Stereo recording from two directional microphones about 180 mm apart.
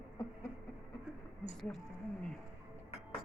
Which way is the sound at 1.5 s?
Centre (ahead or behind).